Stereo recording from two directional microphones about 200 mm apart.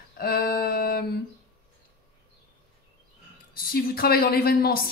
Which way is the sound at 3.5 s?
50° left (ahead or behind).